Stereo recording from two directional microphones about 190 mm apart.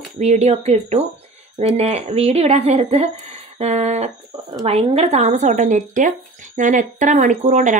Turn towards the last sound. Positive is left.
turn(degrees=-40)  # may be behind; listen again after turning